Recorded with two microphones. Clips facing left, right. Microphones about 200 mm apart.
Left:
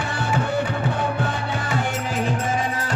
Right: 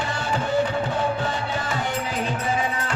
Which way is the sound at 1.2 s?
55° left (ahead or behind).